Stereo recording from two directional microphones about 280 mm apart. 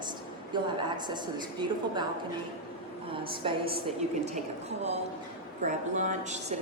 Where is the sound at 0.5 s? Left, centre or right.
Centre.